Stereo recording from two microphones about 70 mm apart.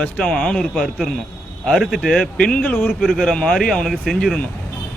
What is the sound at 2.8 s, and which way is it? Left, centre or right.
Speech, centre.